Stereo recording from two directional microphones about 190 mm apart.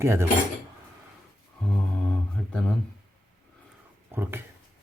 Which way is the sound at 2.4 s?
10° left (ahead or behind).